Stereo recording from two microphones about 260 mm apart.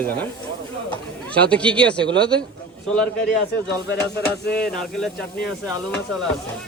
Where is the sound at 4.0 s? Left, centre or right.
Left.